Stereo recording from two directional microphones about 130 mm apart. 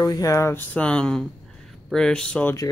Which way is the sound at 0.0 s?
25° left (ahead or behind).